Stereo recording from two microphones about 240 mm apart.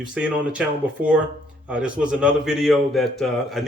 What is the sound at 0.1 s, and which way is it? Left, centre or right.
Speech, centre.